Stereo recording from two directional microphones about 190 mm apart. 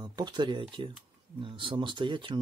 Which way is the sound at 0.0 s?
20° right (ahead or behind).